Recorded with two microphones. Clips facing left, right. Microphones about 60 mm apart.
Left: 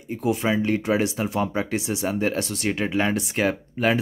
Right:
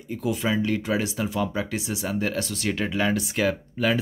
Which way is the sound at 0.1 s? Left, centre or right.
Left.